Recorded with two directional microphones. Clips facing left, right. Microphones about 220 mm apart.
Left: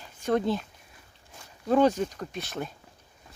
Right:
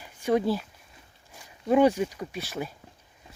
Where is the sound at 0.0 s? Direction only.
10° right (ahead or behind).